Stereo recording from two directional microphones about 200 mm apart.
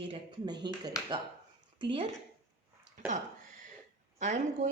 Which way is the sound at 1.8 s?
25° right (ahead or behind).